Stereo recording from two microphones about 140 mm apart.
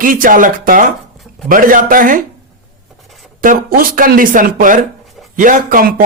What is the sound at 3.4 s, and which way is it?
Speech, 85° right.